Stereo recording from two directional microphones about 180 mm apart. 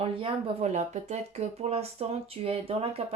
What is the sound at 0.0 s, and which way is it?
Speech, 30° right (ahead or behind).